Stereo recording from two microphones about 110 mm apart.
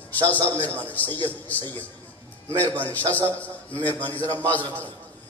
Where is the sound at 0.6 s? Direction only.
15° left (ahead or behind).